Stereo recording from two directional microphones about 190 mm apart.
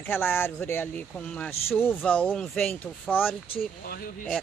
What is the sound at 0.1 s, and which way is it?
Speech, 10° left (ahead or behind).